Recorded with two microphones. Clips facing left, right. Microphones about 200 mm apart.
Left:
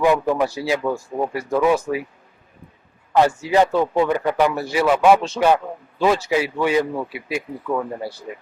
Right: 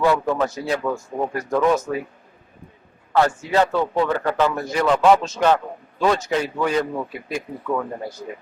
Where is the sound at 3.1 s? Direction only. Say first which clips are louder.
Left 2 dB; 15° left (ahead or behind).